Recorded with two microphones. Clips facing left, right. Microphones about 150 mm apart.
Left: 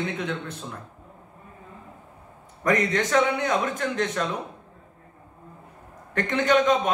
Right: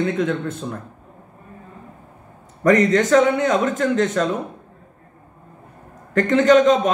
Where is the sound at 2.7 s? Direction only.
45° right (ahead or behind).